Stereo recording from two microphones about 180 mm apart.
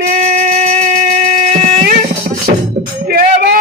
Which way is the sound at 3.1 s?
60° right (ahead or behind).